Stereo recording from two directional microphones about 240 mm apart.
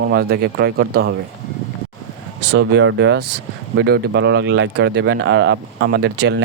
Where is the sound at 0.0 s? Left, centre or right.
Right.